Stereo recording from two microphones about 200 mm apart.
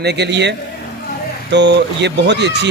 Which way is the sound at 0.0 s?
55° right (ahead or behind).